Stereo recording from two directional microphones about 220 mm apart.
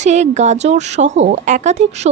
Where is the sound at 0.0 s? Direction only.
30° right (ahead or behind).